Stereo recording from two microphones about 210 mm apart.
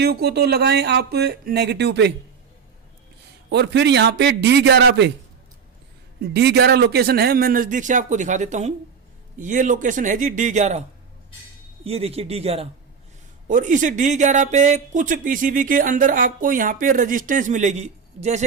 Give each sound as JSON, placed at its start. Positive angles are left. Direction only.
{"t": 0.0, "sound": "speech", "side_deg": -50}
{"t": 3.5, "sound": "speech", "side_deg": -55}
{"t": 6.3, "sound": "speech", "side_deg": -50}
{"t": 11.9, "sound": "a man's voice", "side_deg": -30}